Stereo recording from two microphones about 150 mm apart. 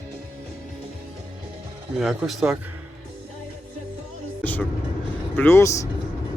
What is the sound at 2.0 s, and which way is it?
Speech, centre (ahead or behind).